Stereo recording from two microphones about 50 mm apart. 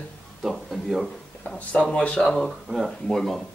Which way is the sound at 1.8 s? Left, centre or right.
Centre.